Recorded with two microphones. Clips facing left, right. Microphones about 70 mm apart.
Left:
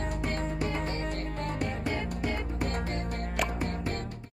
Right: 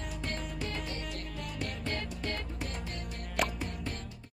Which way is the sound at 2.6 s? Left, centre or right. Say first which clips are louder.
Left 8 dB; left.